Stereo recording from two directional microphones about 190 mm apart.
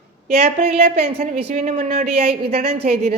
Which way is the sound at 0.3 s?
35° right (ahead or behind).